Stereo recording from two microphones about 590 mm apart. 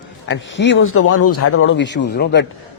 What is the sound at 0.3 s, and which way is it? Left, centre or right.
A man's voice, centre.